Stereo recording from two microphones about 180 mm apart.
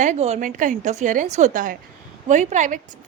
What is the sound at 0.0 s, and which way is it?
A woman's voice, 40° right (ahead or behind).